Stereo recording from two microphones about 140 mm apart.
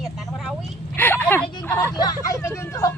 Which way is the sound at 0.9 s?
15° left (ahead or behind).